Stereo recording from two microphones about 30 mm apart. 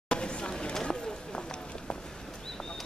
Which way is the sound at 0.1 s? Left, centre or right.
Left.